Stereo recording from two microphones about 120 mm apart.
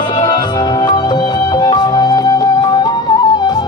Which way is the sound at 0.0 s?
40° left (ahead or behind).